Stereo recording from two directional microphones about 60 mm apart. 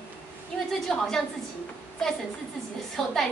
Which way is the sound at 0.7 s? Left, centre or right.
Centre.